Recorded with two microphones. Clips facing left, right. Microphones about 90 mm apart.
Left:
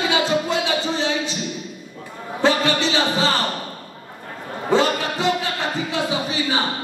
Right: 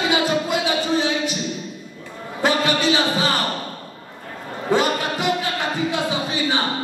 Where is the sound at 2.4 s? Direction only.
15° right (ahead or behind).